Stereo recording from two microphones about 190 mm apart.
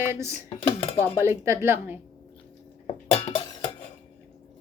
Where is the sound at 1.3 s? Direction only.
15° right (ahead or behind).